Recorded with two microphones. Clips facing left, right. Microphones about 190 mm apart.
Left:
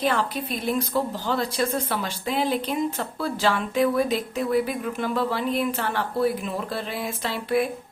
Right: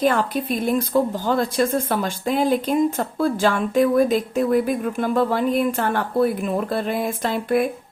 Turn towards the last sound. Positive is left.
turn(degrees=-50)  # may be behind; listen again after turning